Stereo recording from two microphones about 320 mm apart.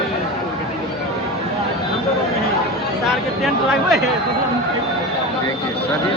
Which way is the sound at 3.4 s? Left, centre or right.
Centre.